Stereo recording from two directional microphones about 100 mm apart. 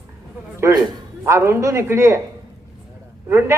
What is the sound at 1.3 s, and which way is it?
Speech, 25° right (ahead or behind).